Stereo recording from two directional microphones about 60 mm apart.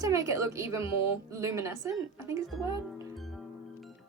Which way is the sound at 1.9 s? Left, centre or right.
Right.